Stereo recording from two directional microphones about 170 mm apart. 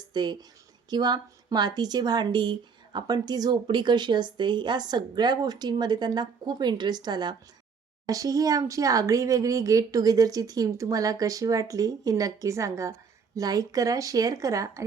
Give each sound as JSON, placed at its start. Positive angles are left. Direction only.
{"t": 0.1, "sound": "a woman's voice", "side_deg": -25}